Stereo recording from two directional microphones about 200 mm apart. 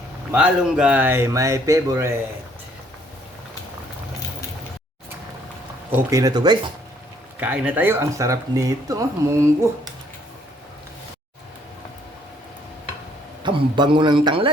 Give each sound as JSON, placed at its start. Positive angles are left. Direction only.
{"t": 0.3, "sound": "speech", "side_deg": -5}
{"t": 6.1, "sound": "a man's voice", "side_deg": -15}
{"t": 7.3, "sound": "speech", "side_deg": -5}
{"t": 13.4, "sound": "a man's voice", "side_deg": -25}